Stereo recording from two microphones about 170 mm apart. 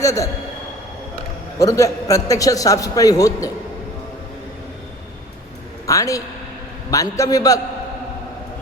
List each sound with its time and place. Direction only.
0.0 s a man's voice: 20° left (ahead or behind)
1.5 s a man's voice: 20° left (ahead or behind)
5.8 s a woman's voice: 20° left (ahead or behind)